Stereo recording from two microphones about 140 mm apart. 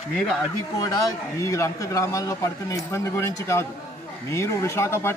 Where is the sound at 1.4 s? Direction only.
20° left (ahead or behind).